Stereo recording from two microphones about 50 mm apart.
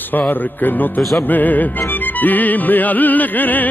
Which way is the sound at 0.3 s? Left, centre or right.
Left.